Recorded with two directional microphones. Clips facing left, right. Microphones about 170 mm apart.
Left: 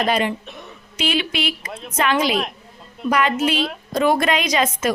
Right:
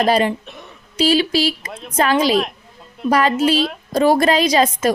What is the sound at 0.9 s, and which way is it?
A woman's voice, 35° right (ahead or behind).